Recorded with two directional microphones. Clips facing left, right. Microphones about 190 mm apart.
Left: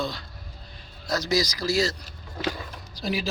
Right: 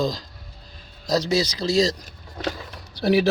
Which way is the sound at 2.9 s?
65° right (ahead or behind).